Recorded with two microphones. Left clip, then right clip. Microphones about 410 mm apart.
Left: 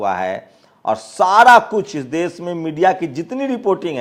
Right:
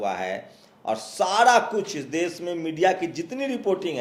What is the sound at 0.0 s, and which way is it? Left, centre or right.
A man's voice, left.